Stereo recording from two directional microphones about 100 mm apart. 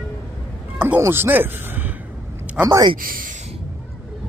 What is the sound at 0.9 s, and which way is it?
Speech, 25° right (ahead or behind).